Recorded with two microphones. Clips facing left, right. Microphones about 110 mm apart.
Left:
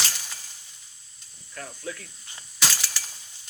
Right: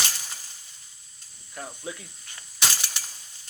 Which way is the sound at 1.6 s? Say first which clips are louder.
Even; 20° right (ahead or behind).